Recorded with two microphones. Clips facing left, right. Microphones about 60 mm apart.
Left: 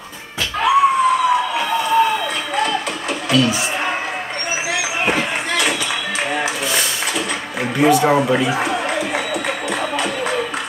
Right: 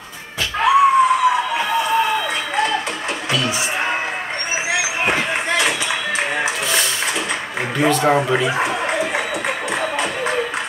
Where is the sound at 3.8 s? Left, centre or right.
Centre.